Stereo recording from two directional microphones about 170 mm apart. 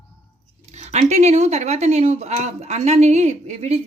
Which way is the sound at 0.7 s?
40° right (ahead or behind).